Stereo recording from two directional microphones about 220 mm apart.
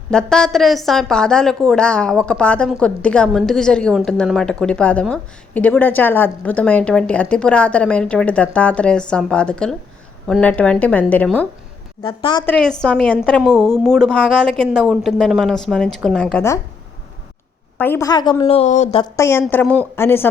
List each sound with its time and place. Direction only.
0.1 s a woman's voice: 5° left (ahead or behind)
12.0 s a woman's voice: 20° left (ahead or behind)
12.5 s a woman's voice: 5° left (ahead or behind)
17.7 s a woman's voice: 10° left (ahead or behind)
19.1 s a woman's voice: 10° left (ahead or behind)